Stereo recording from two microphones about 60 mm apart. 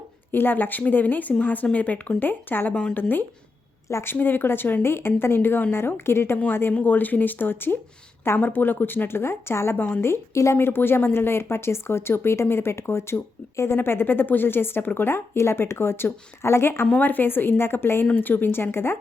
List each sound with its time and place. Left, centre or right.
0.3 s speech: left
10.6 s speech: left
17.0 s speech: left